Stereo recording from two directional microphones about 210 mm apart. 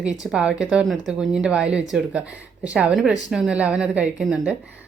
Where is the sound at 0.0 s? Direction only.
5° right (ahead or behind).